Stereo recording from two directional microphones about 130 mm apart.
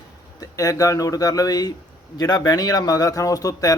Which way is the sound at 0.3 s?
25° left (ahead or behind).